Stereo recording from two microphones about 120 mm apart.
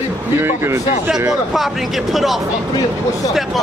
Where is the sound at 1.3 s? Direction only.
Centre (ahead or behind).